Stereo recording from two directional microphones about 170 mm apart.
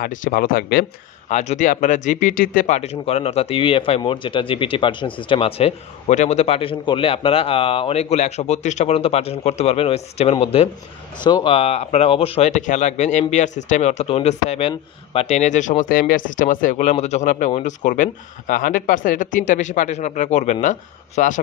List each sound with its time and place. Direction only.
0.0 s speech: 55° left (ahead or behind)
1.3 s speech: 45° left (ahead or behind)